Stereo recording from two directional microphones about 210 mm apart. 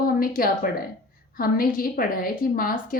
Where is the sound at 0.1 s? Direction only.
40° left (ahead or behind).